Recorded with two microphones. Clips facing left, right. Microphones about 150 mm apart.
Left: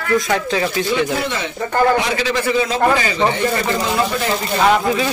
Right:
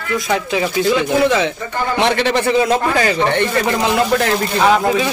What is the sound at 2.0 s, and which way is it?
A man's voice, 65° right (ahead or behind).